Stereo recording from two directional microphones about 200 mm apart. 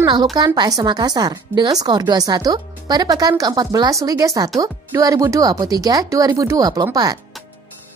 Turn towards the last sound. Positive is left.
turn(degrees=-20)  # may be behind; listen again after turning